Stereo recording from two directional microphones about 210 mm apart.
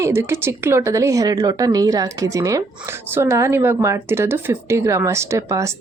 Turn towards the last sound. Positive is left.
turn(degrees=-15)  # may be behind; listen again after turning